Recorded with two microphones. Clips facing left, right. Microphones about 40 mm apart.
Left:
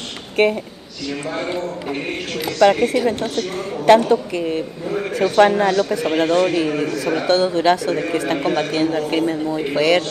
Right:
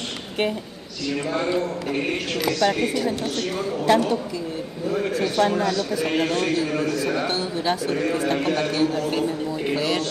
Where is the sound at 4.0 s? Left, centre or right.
Left.